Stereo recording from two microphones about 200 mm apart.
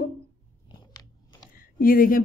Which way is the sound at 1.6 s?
45° left (ahead or behind).